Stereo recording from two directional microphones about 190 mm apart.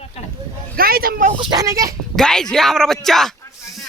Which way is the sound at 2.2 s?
5° left (ahead or behind).